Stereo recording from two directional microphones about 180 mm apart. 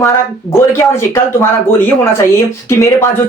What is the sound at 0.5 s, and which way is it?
Speech, 15° left (ahead or behind).